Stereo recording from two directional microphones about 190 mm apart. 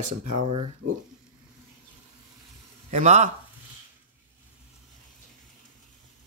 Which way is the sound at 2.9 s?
35° right (ahead or behind).